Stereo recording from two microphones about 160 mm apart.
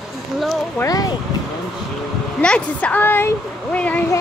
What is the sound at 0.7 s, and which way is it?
Speech, 20° left (ahead or behind).